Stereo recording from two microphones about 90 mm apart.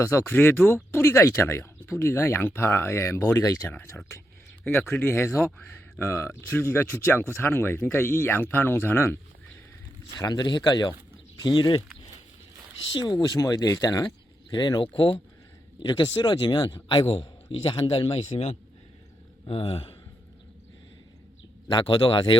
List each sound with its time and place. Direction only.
0.0 s a man's voice: 30° left (ahead or behind)
10.2 s speech: 50° left (ahead or behind)
13.1 s speech: 40° left (ahead or behind)
14.5 s speech: 55° left (ahead or behind)
15.8 s a man's voice: 55° left (ahead or behind); by 18.2 s 80° left
19.5 s speech: 90° left
21.7 s speech: 65° left (ahead or behind)